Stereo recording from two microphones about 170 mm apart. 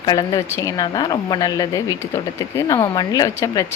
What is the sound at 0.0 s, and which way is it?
Speech, 25° left (ahead or behind).